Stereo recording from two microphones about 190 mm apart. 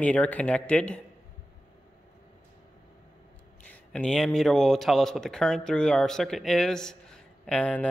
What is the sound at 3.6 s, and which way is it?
Speech, 5° left (ahead or behind).